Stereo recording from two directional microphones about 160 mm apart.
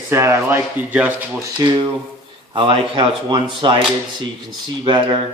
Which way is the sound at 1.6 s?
25° right (ahead or behind).